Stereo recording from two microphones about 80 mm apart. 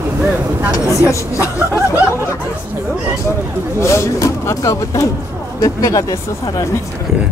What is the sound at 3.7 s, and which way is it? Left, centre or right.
Speech, left.